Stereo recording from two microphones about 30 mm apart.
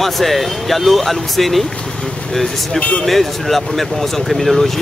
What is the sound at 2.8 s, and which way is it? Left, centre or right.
Speech, left.